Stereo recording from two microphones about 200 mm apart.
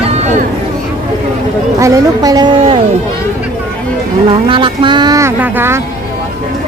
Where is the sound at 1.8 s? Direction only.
15° right (ahead or behind).